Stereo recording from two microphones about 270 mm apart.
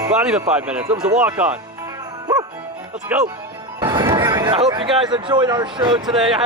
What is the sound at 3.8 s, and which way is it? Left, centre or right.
Speech, centre.